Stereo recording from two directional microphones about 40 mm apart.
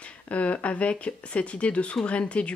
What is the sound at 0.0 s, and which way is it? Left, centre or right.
Speech, left.